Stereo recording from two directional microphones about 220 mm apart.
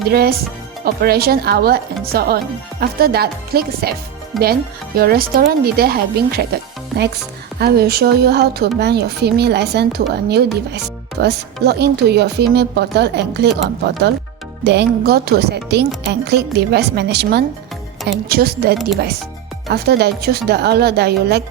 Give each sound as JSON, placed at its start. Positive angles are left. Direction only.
{"t": 0.1, "sound": "a woman's voice", "side_deg": -45}
{"t": 4.3, "sound": "speech", "side_deg": 0}
{"t": 4.9, "sound": "a woman's voice", "side_deg": -40}
{"t": 7.6, "sound": "a woman's voice", "side_deg": -45}